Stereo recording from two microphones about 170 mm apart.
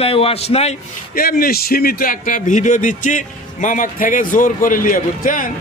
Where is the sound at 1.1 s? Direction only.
60° left (ahead or behind).